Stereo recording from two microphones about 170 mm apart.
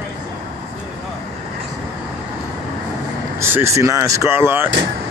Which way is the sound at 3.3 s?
15° right (ahead or behind).